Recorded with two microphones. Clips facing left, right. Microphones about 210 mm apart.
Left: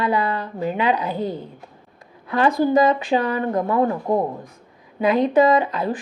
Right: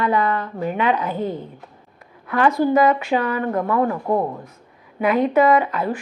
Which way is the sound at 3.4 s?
20° left (ahead or behind).